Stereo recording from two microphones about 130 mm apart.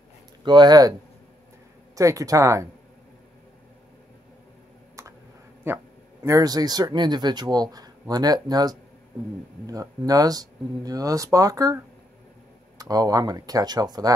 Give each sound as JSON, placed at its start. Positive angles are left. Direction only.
{"t": 0.5, "sound": "speech", "side_deg": -35}
{"t": 2.0, "sound": "speech", "side_deg": -25}
{"t": 5.0, "sound": "a sound", "side_deg": -25}
{"t": 5.7, "sound": "a man's voice", "side_deg": -15}
{"t": 6.2, "sound": "speech", "side_deg": -25}